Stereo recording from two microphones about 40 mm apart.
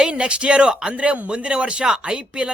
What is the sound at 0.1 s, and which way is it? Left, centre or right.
Speech, right.